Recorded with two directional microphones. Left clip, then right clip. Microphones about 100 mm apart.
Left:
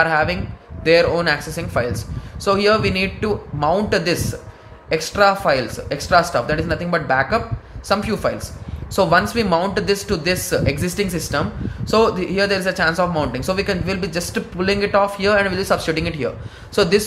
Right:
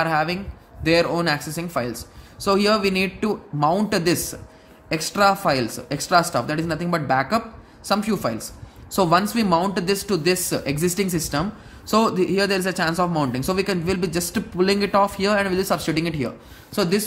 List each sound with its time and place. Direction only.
0.0 s speech: 35° right (ahead or behind)